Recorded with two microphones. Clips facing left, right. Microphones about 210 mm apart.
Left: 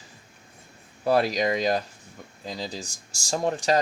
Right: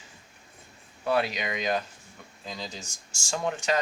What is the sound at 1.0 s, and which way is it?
Speech, 35° left (ahead or behind).